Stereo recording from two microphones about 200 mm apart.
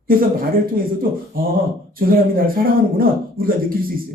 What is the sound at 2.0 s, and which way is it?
A man's voice, 45° right (ahead or behind).